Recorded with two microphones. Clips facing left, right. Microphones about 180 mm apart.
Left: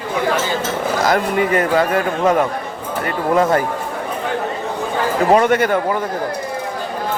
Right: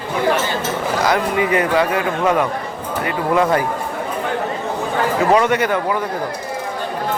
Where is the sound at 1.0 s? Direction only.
45° left (ahead or behind).